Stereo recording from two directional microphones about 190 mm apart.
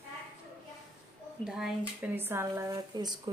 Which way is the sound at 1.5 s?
Centre (ahead or behind).